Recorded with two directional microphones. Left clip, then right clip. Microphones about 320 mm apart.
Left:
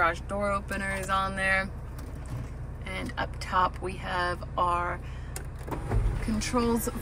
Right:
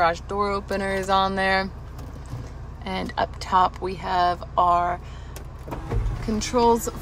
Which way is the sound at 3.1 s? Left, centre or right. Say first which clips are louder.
Right 7 dB; centre.